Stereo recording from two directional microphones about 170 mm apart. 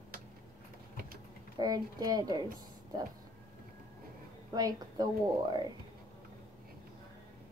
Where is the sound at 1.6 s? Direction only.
25° right (ahead or behind).